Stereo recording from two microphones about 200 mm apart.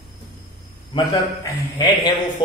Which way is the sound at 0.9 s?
15° left (ahead or behind).